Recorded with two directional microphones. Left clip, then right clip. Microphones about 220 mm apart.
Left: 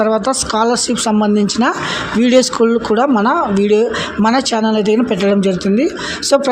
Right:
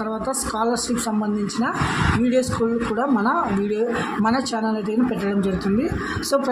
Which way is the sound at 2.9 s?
35° left (ahead or behind).